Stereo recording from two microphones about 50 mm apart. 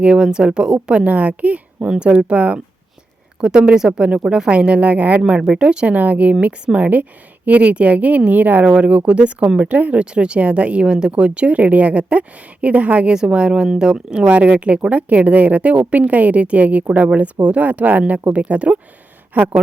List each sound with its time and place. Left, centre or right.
0.0 s speech: centre
5.2 s speech: centre